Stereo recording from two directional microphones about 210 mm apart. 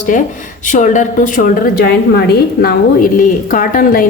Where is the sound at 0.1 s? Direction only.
40° left (ahead or behind).